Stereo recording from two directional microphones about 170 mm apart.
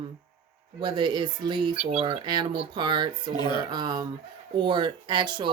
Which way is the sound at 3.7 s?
25° right (ahead or behind).